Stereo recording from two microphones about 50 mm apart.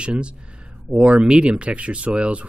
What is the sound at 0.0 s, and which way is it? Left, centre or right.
Speech, right.